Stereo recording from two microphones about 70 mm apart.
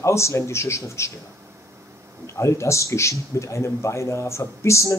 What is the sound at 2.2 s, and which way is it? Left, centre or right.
A man's voice, left.